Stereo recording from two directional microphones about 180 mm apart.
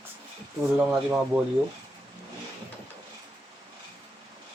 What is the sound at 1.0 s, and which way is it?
Speech, 5° right (ahead or behind).